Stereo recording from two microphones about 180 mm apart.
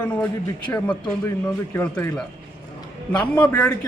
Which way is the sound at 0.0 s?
5° left (ahead or behind).